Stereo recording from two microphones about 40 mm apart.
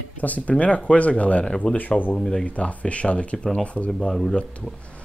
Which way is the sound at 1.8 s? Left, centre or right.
Left.